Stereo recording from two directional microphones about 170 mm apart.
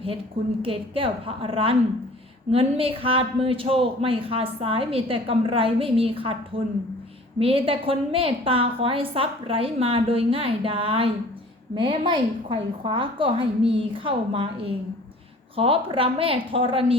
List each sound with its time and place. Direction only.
0.6 s a man's voice: 30° right (ahead or behind)